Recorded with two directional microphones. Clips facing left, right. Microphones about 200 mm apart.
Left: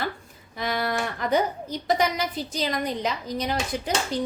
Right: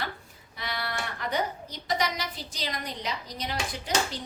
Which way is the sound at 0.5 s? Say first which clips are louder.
Left 8 dB; 45° left (ahead or behind).